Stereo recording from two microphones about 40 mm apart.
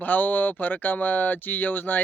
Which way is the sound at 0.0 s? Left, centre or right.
Left.